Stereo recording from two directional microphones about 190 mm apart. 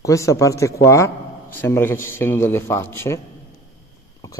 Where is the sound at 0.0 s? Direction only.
15° left (ahead or behind).